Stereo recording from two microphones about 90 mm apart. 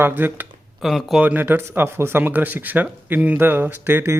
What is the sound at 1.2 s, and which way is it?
Speech, 20° right (ahead or behind).